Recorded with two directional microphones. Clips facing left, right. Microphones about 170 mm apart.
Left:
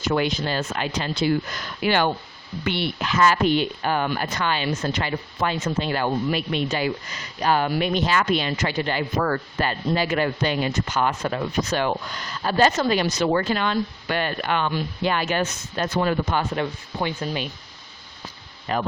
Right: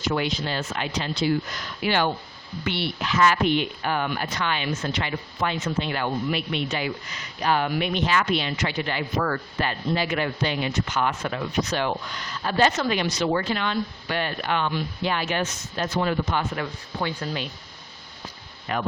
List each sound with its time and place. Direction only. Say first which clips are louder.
0.1 s speech: left 3 dB; 50° left (ahead or behind)
16.6 s speech: left 3 dB; 20° left (ahead or behind)
18.7 s speech: left 3 dB; 35° left (ahead or behind)